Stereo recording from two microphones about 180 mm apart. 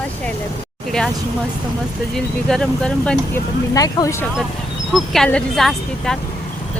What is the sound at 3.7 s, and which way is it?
Speech, 20° left (ahead or behind).